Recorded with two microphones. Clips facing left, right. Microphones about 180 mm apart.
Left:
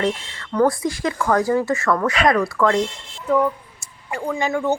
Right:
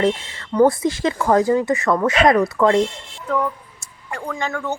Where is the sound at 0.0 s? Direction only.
25° right (ahead or behind).